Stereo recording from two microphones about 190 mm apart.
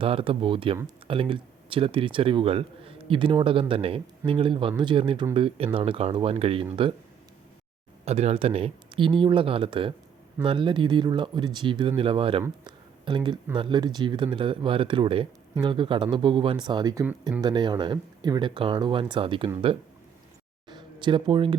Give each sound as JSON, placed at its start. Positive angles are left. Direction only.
{"t": 0.0, "sound": "speech", "side_deg": -30}
{"t": 8.0, "sound": "speech", "side_deg": -35}
{"t": 12.4, "sound": "a sound", "side_deg": -25}
{"t": 13.6, "sound": "speech", "side_deg": -25}
{"t": 17.4, "sound": "speech", "side_deg": -25}
{"t": 20.7, "sound": "a sound", "side_deg": -25}